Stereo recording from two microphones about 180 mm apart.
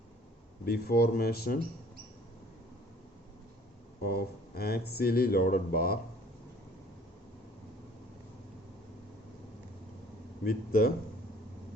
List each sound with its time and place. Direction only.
0.6 s speech: 60° left (ahead or behind)
4.0 s speech: 60° left (ahead or behind)
10.4 s speech: 55° left (ahead or behind)